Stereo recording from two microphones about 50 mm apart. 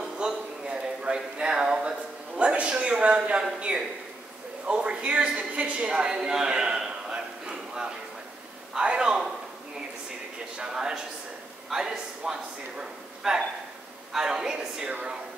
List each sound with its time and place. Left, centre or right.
0.2 s a sound: centre
3.5 s a woman's voice: centre
10.6 s a man's voice: centre
14.9 s speech: right